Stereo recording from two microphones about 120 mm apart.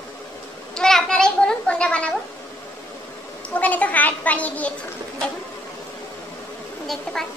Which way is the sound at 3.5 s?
15° left (ahead or behind).